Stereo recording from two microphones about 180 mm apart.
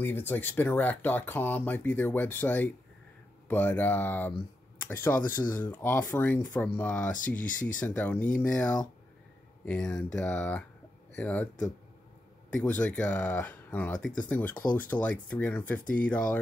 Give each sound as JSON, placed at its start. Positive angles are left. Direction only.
{"t": 0.0, "sound": "speech", "side_deg": 10}
{"t": 4.7, "sound": "a sound", "side_deg": 10}
{"t": 5.3, "sound": "speech", "side_deg": 10}
{"t": 12.4, "sound": "speech", "side_deg": 5}
{"t": 14.6, "sound": "speech", "side_deg": 50}
{"t": 14.9, "sound": "speech", "side_deg": 10}
{"t": 15.8, "sound": "speech", "side_deg": 50}
{"t": 16.1, "sound": "speech", "side_deg": 10}